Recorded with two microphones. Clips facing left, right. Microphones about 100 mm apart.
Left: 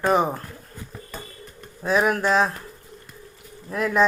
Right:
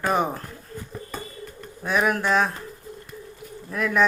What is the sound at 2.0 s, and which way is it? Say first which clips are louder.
Speech: even; 30° left (ahead or behind).